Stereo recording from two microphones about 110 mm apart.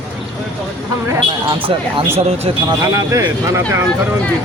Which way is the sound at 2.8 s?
30° right (ahead or behind).